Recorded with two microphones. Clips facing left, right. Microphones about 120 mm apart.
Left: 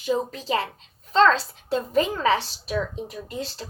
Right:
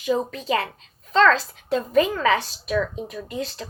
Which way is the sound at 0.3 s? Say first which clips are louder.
Right 2 dB; 30° left (ahead or behind).